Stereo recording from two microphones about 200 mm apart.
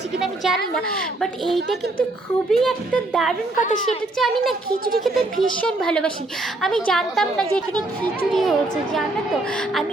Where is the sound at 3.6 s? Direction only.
40° left (ahead or behind).